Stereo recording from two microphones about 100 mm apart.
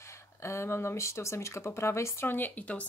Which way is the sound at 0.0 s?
30° left (ahead or behind).